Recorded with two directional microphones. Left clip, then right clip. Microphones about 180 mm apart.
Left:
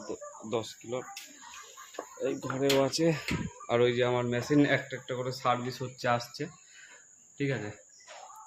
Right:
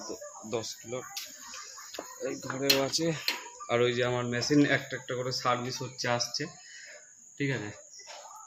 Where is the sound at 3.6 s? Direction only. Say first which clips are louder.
Left 1 dB; 5° left (ahead or behind).